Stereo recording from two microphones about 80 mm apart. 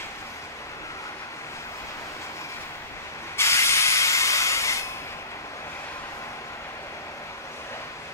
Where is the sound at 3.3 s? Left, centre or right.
Left.